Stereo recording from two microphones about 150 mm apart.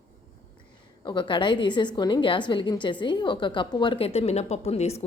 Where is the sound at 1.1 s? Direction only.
35° left (ahead or behind).